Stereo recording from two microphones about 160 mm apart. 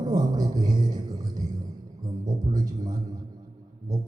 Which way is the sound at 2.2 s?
25° right (ahead or behind).